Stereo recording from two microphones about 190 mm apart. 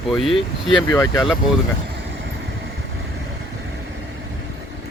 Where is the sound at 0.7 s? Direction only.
20° left (ahead or behind).